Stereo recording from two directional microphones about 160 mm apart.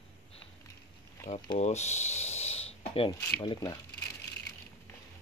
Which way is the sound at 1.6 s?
45° left (ahead or behind).